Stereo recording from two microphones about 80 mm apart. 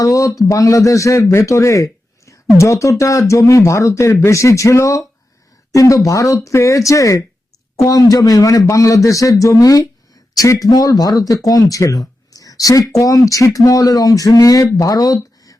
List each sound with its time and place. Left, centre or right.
0.0 s a man's voice: left